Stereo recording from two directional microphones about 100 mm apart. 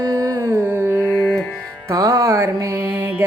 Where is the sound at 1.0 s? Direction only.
15° left (ahead or behind).